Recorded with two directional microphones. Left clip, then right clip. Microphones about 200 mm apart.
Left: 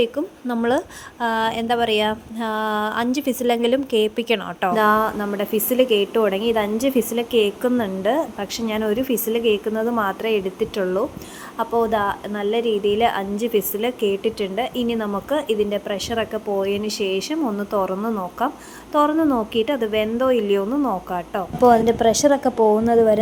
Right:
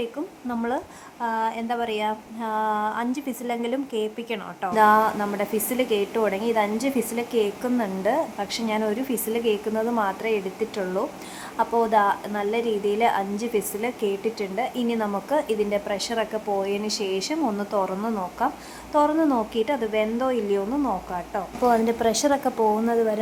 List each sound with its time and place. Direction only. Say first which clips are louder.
0.0 s a woman's voice: left 8 dB; 20° left (ahead or behind)